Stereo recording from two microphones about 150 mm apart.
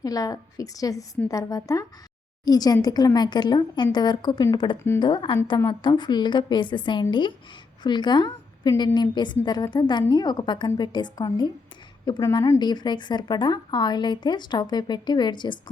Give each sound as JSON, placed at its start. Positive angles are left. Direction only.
{"t": 0.0, "sound": "a woman's voice", "side_deg": 25}